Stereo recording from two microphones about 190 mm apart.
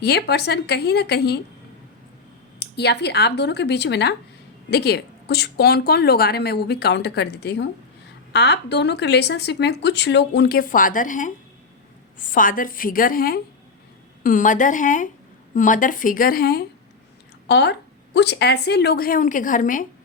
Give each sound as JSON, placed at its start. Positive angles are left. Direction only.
{"t": 0.0, "sound": "speech", "side_deg": 60}
{"t": 2.6, "sound": "speech", "side_deg": 60}
{"t": 12.3, "sound": "a woman's voice", "side_deg": 45}
{"t": 17.5, "sound": "speech", "side_deg": 65}